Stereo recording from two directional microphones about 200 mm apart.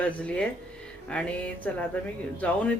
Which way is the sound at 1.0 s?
5° left (ahead or behind).